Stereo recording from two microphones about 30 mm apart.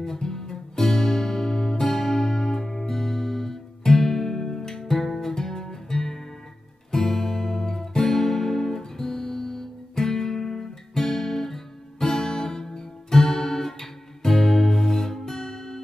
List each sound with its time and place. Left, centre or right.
0.0 s music: centre
6.9 s guitar: centre
12.1 s music: left